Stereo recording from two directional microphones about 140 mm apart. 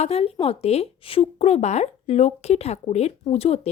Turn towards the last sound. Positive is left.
turn(degrees=45)  # may be behind; listen again after turning